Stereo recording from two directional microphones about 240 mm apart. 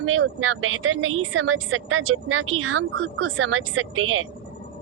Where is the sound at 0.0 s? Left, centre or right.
Right.